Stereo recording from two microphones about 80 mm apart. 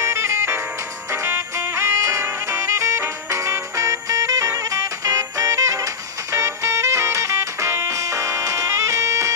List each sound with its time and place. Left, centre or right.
0.0 s music: right